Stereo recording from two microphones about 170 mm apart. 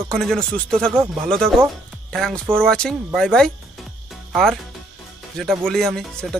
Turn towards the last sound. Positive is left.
turn(degrees=5)  # may be behind; listen again after turning